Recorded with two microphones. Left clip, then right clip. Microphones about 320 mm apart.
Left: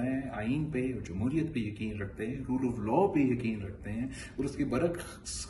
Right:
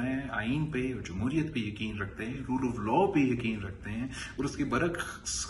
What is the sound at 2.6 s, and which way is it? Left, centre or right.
Speech, right.